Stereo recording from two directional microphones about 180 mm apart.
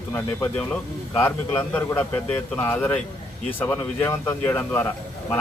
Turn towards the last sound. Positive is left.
turn(degrees=15)  # may be behind; listen again after turning